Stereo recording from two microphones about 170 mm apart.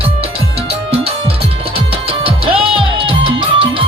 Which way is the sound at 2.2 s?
35° right (ahead or behind).